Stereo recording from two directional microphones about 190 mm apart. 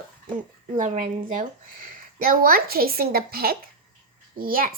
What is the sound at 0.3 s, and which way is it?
A child's voice, 40° right (ahead or behind).